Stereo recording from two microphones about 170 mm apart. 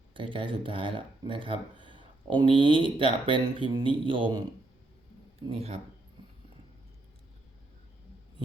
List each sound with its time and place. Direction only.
0.1 s speech: 30° right (ahead or behind)